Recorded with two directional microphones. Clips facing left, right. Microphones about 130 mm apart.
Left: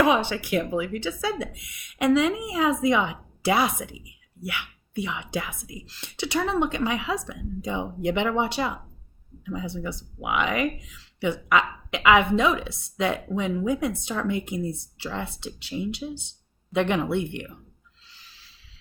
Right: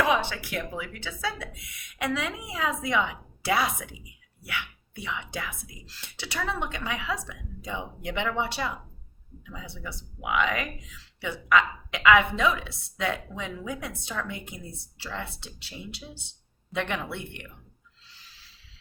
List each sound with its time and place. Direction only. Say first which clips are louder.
0.1 s a woman's voice: left 4 dB; 20° left (ahead or behind)